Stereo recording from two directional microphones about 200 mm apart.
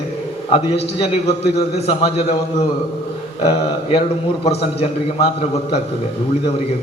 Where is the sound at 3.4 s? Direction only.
25° left (ahead or behind).